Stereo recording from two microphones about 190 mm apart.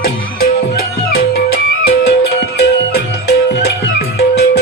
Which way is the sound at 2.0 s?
60° left (ahead or behind).